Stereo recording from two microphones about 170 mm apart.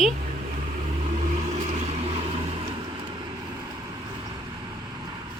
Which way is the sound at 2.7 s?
25° right (ahead or behind).